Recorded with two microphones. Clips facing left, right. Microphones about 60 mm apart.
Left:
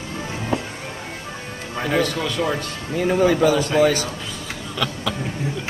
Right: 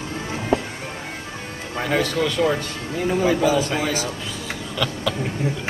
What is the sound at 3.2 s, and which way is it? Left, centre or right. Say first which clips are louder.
Speech: left 2 dB; left.